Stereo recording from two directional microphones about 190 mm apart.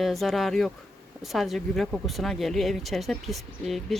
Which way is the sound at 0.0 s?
Centre (ahead or behind).